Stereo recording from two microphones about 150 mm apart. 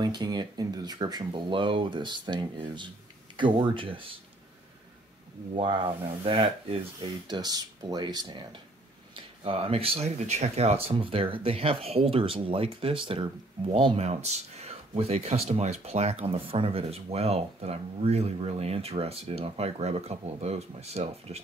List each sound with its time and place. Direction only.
0.0 s speech: 30° right (ahead or behind)
5.6 s speech: 35° right (ahead or behind)
9.1 s speech: 40° right (ahead or behind)